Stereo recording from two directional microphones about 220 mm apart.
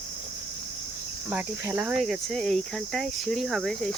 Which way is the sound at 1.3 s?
5° right (ahead or behind).